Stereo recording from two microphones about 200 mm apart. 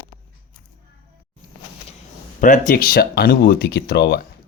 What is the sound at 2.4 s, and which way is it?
Speech, 40° left (ahead or behind).